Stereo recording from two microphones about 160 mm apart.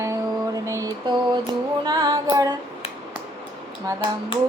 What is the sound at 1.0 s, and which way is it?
Female singing, 30° right (ahead or behind).